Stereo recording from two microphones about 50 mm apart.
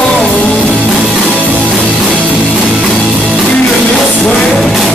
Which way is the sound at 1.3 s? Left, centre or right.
Right.